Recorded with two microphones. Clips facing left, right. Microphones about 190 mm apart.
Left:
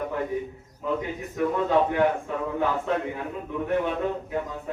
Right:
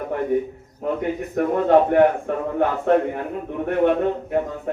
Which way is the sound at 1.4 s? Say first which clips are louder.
Right 6 dB; 55° right (ahead or behind).